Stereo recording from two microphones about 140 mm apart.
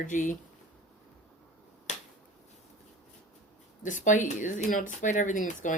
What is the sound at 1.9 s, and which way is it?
Finger snapping, 55° left (ahead or behind).